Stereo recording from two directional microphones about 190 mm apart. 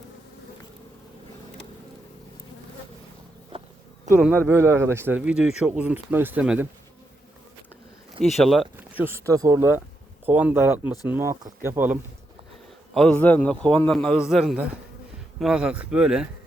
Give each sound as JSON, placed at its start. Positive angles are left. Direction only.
{"t": 3.5, "sound": "insect", "side_deg": -30}
{"t": 4.4, "sound": "speech", "side_deg": -15}
{"t": 8.2, "sound": "speech", "side_deg": 0}
{"t": 9.0, "sound": "speech", "side_deg": -15}
{"t": 12.9, "sound": "speech", "side_deg": 5}